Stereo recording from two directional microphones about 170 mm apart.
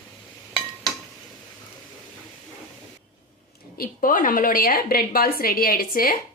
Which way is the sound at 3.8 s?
55° left (ahead or behind).